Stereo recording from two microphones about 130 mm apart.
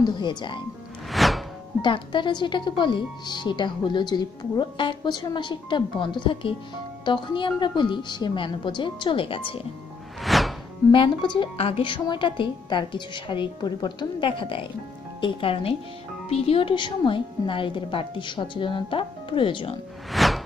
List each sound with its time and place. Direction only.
0.0 s speech: 35° left (ahead or behind)
1.1 s music: centre (ahead or behind)
1.8 s speech: 40° left (ahead or behind)
10.2 s whoosh: centre (ahead or behind)
10.9 s speech: 40° left (ahead or behind)
20.1 s whoosh: centre (ahead or behind)